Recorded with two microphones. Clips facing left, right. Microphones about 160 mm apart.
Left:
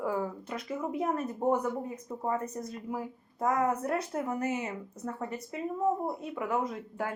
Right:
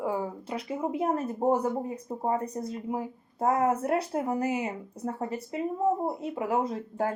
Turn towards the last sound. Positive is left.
turn(degrees=-35)  # may be behind; listen again after turning